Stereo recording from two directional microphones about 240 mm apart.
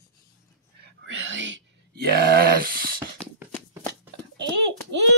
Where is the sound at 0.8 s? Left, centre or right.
Right.